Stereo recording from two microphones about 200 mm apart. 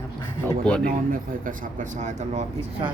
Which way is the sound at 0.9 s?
45° right (ahead or behind).